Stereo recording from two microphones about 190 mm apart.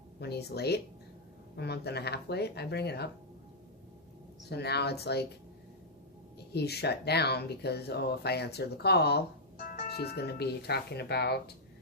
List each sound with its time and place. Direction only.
0.2 s speech: 60° left (ahead or behind)
4.4 s speech: 60° left (ahead or behind)
6.5 s speech: 60° left (ahead or behind)